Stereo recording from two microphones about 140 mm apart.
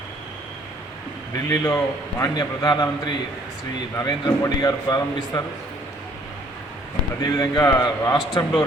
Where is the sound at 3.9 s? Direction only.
30° left (ahead or behind).